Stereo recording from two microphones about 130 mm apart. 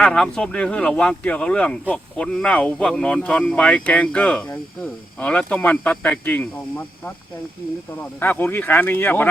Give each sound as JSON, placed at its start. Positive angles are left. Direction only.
{"t": 0.0, "sound": "speech", "side_deg": 5}